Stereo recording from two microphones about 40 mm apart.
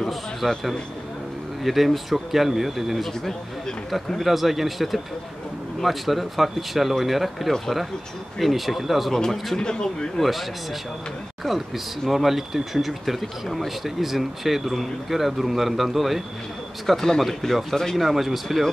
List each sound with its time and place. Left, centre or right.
0.4 s speech: centre
1.6 s speech: centre
3.1 s speech: centre
4.2 s speech: centre
9.1 s speech: centre
9.6 s speech: left
11.4 s speech: centre